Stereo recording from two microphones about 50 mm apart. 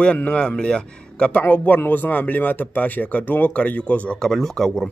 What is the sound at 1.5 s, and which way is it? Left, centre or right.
Speech, left.